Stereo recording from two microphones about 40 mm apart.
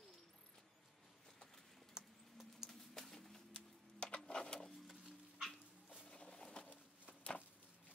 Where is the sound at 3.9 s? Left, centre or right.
Left.